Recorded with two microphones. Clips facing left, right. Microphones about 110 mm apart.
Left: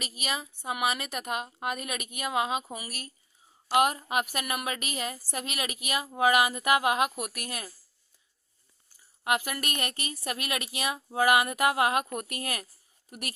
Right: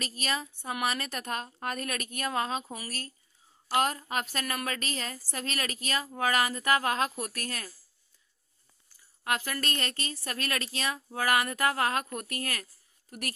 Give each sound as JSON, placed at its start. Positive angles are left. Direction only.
{"t": 0.0, "sound": "a woman's voice", "side_deg": 5}
{"t": 9.2, "sound": "a woman's voice", "side_deg": 20}